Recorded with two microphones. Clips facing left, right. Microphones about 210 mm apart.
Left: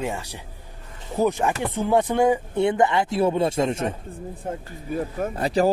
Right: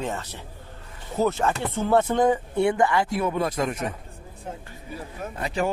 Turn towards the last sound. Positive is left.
turn(degrees=35)  # may be behind; listen again after turning